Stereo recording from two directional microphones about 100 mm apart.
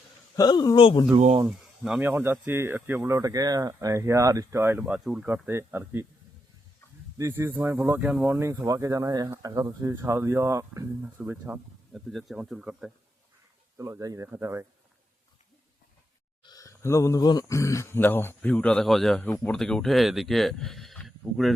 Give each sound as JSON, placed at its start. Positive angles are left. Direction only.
{"t": 0.3, "sound": "speech", "side_deg": 40}
{"t": 1.5, "sound": "a sound", "side_deg": -5}
{"t": 2.0, "sound": "speech", "side_deg": -20}
{"t": 3.2, "sound": "speech", "side_deg": -35}
{"t": 7.2, "sound": "speech", "side_deg": -25}
{"t": 8.0, "sound": "speech", "side_deg": -15}
{"t": 8.4, "sound": "speech", "side_deg": -30}
{"t": 9.9, "sound": "speech", "side_deg": -25}
{"t": 11.0, "sound": "speech", "side_deg": -20}
{"t": 11.9, "sound": "speech", "side_deg": -5}
{"t": 13.7, "sound": "speech", "side_deg": -30}
{"t": 14.3, "sound": "speech", "side_deg": -25}
{"t": 16.4, "sound": "speech", "side_deg": 40}